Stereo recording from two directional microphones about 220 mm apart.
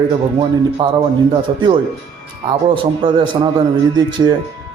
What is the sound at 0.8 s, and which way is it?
Speech, 25° right (ahead or behind).